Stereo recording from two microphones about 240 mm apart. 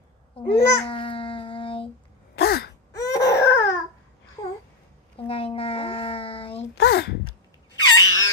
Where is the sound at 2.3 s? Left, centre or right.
Left.